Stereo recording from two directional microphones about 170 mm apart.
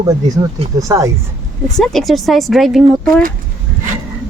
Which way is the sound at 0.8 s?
20° right (ahead or behind).